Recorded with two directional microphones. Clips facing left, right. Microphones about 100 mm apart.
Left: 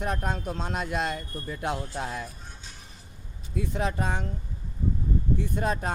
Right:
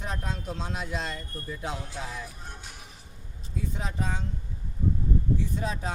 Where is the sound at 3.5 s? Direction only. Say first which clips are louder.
Left 6 dB; 70° left (ahead or behind).